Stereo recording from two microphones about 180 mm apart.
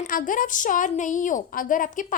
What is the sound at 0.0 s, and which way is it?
A woman's voice, 50° left (ahead or behind).